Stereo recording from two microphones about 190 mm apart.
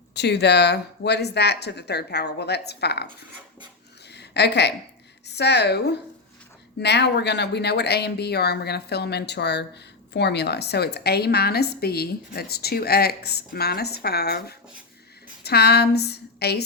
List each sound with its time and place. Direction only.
0.1 s speech: 60° left (ahead or behind)
4.0 s a sound: 60° left (ahead or behind)
5.2 s a woman's voice: 60° left (ahead or behind)